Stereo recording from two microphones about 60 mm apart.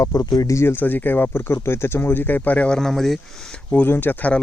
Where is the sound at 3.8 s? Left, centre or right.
Left.